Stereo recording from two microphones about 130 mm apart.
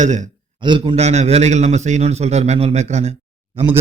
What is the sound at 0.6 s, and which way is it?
Speech, 40° right (ahead or behind).